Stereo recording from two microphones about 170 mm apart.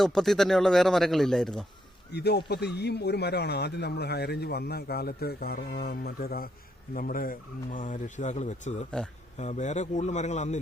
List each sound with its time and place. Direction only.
0.0 s speech: centre (ahead or behind)
2.1 s speech: 75° left (ahead or behind); by 10.6 s 45° left (ahead or behind)